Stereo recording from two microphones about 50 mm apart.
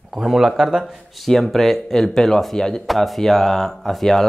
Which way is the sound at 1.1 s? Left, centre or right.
Centre.